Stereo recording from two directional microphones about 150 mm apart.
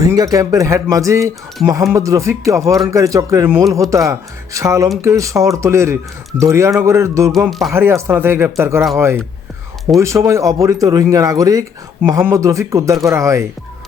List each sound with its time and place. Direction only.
0.0 s speech: 25° right (ahead or behind)
7.3 s speech: centre (ahead or behind)
7.7 s speech: 15° right (ahead or behind)
10.0 s speech: 20° right (ahead or behind)